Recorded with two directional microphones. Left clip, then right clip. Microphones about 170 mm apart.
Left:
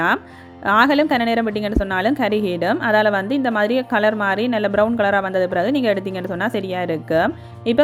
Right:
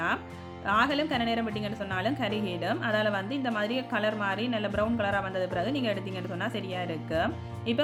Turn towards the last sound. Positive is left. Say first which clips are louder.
# left 10 dB
turn(degrees=45)  # may be behind; listen again after turning